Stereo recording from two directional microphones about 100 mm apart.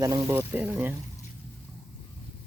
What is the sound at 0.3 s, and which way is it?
Speech, 20° right (ahead or behind).